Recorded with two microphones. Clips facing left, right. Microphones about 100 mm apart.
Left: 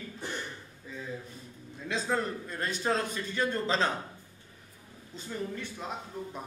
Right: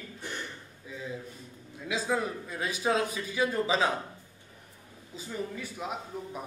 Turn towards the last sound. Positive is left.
turn(degrees=-5)  # may be behind; listen again after turning